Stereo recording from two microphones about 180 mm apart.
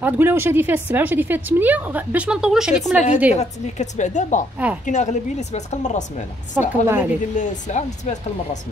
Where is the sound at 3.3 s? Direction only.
40° left (ahead or behind).